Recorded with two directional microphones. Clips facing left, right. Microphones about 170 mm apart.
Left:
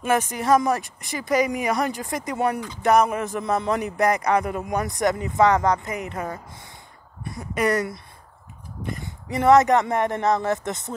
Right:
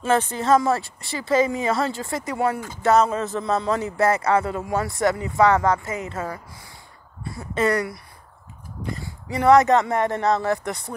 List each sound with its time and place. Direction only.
0.0 s speech: 10° left (ahead or behind)